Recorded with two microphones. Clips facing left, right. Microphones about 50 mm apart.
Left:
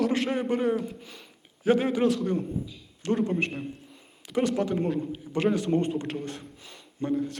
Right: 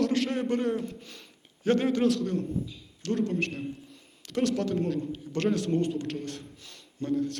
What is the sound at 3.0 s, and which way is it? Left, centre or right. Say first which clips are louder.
A man's voice: left 2 dB; centre.